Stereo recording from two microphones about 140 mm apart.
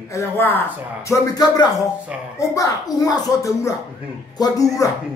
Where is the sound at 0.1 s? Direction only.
15° left (ahead or behind).